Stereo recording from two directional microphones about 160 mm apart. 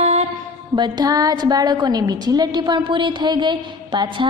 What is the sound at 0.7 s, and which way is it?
A woman's voice, 25° right (ahead or behind).